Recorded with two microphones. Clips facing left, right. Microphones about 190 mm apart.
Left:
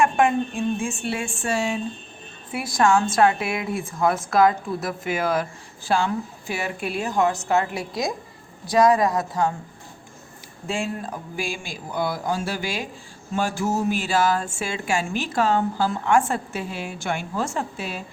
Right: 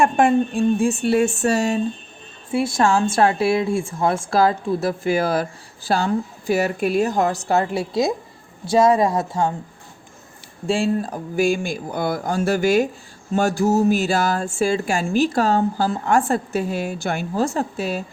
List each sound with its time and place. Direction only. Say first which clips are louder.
0.0 s speech: right 3 dB; 35° right (ahead or behind)
2.5 s speech: right 2 dB; 25° right (ahead or behind)
10.7 s speech: right 7 dB; 35° right (ahead or behind)